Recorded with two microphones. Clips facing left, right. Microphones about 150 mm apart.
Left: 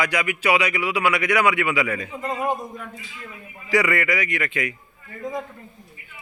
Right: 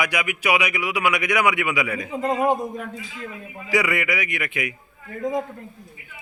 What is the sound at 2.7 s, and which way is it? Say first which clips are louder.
Speech: right 5 dB; 65° right (ahead or behind).